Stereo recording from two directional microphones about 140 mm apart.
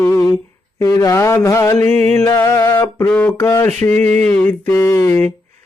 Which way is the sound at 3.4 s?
20° left (ahead or behind).